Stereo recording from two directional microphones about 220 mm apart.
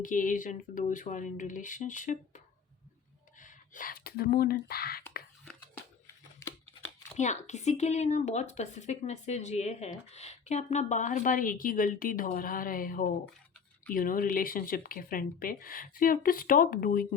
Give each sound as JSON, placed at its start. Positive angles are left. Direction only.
{"t": 0.0, "sound": "speech", "side_deg": 35}
{"t": 6.4, "sound": "a sound", "side_deg": 10}
{"t": 7.2, "sound": "speech", "side_deg": 30}